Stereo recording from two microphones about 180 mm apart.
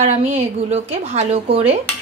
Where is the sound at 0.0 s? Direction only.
40° right (ahead or behind).